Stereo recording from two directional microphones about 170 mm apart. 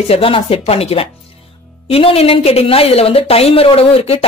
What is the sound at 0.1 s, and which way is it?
A woman's voice, 35° left (ahead or behind).